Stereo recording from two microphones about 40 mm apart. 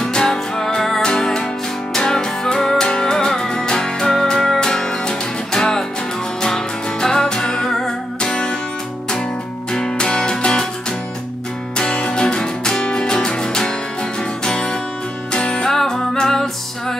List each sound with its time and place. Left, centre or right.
0.0 s music: centre
9.7 s music: centre
11.7 s music: left